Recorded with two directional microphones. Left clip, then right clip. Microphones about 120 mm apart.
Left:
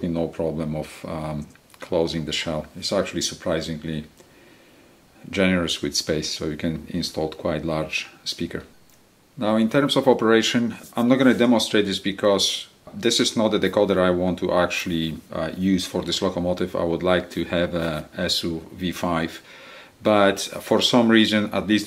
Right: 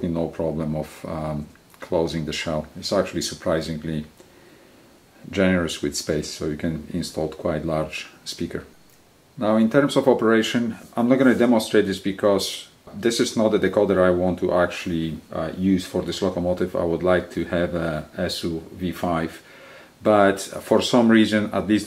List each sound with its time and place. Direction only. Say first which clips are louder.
0.0 s speech: even; 30° left (ahead or behind)
5.3 s speech: even; 30° left (ahead or behind)